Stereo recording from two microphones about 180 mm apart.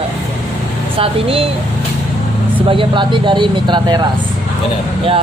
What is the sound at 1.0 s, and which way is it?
Speech, 30° right (ahead or behind).